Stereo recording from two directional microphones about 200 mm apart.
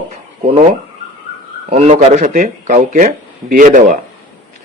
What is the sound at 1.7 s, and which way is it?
A man's voice, 35° right (ahead or behind).